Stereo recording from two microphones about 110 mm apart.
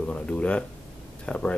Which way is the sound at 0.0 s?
10° left (ahead or behind).